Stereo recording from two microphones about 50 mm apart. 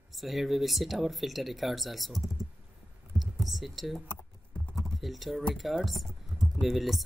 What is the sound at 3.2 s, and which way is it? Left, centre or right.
Speech, centre.